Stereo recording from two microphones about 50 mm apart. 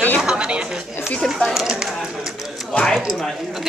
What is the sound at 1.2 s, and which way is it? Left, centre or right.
Speech, centre.